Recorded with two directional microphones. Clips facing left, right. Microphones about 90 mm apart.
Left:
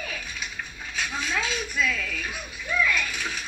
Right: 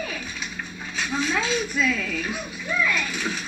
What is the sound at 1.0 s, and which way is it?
Speech, 25° right (ahead or behind).